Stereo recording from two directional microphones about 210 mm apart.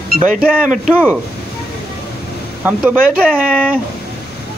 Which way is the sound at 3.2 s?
5° left (ahead or behind).